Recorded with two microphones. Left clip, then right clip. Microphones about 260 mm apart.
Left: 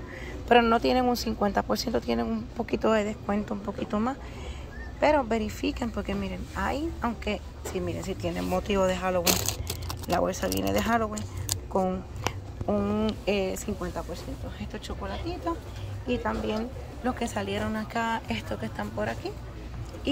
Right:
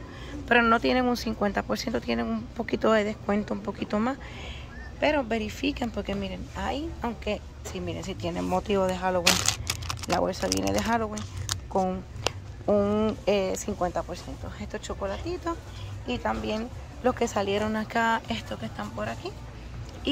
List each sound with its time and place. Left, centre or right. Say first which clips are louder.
0.6 s a woman's voice: right 1 dB; centre
18.3 s speech: left 1 dB; centre